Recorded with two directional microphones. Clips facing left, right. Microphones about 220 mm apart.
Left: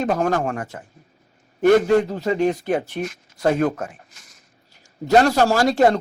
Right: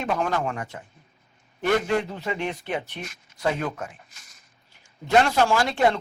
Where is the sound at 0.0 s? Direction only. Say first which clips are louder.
Left 5 dB; 40° left (ahead or behind).